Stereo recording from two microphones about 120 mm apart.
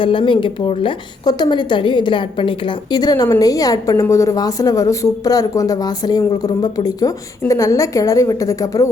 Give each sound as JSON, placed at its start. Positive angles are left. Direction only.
{"t": 0.0, "sound": "a woman's voice", "side_deg": 45}
{"t": 1.2, "sound": "a woman's voice", "side_deg": 35}